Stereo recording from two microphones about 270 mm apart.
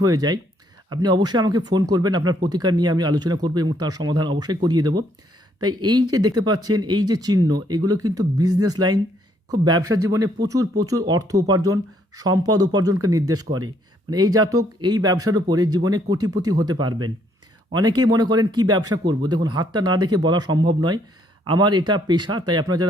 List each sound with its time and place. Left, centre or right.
0.0 s speech: centre